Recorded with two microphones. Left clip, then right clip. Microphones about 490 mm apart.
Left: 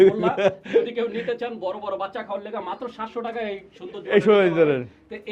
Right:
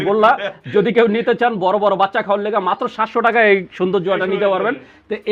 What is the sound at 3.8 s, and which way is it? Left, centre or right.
Speech, right.